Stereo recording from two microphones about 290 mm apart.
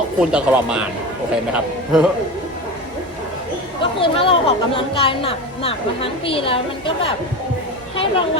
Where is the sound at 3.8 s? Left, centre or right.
Centre.